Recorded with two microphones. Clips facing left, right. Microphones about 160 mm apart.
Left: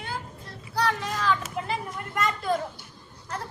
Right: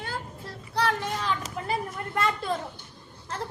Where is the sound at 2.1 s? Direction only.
30° right (ahead or behind).